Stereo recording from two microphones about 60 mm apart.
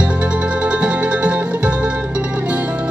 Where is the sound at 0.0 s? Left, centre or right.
Centre.